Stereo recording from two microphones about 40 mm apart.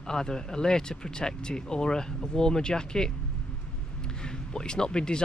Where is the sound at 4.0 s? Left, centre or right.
Left.